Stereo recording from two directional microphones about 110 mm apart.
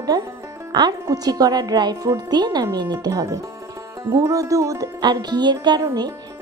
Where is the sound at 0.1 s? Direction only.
40° right (ahead or behind).